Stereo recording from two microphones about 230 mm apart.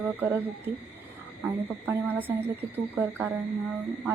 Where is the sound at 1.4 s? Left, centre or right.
Centre.